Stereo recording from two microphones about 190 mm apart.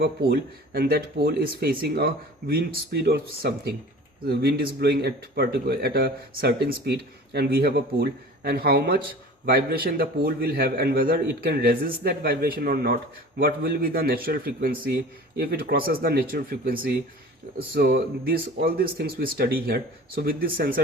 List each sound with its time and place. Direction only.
0.0 s a man's voice: 55° right (ahead or behind)